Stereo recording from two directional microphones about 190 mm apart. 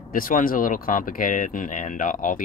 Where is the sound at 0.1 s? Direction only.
45° left (ahead or behind).